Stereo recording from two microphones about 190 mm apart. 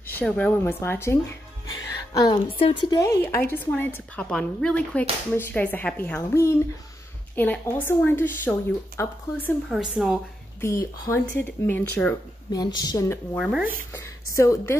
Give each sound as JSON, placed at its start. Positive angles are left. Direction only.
{"t": 0.0, "sound": "a woman's voice", "side_deg": 10}
{"t": 2.1, "sound": "a woman's voice", "side_deg": 25}
{"t": 9.7, "sound": "speech", "side_deg": 0}
{"t": 10.6, "sound": "a woman's voice", "side_deg": 15}
{"t": 12.5, "sound": "a woman's voice", "side_deg": 20}
{"t": 13.4, "sound": "speech", "side_deg": -5}
{"t": 14.3, "sound": "a woman's voice", "side_deg": 15}